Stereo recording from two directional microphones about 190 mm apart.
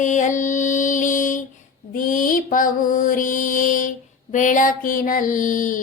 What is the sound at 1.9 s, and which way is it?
Mantra, 45° left (ahead or behind).